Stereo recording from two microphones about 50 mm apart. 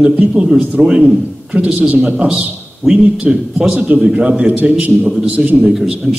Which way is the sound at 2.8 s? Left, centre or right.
Centre.